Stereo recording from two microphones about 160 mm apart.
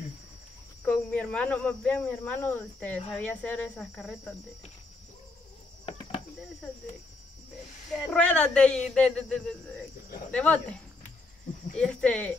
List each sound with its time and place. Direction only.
0.8 s speech: 10° left (ahead or behind)
3.9 s speech: centre (ahead or behind)
8.1 s speech: 10° left (ahead or behind)